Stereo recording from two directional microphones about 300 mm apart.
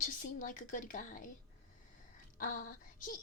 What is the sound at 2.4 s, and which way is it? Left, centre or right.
Speech, left.